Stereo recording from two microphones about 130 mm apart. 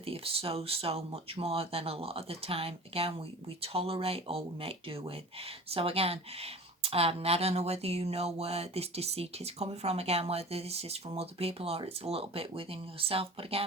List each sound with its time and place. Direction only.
0.0 s speech: 45° right (ahead or behind)